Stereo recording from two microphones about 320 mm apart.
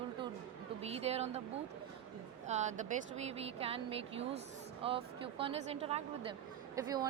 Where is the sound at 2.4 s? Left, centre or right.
Right.